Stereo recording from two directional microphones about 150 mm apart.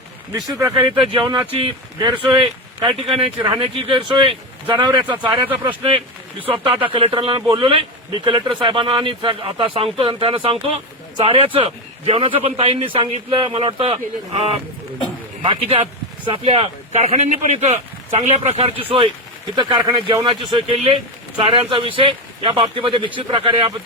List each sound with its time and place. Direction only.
0.3 s speech: 25° right (ahead or behind)
0.7 s a man's voice: 35° right (ahead or behind)
3.4 s a man's voice: 30° right (ahead or behind)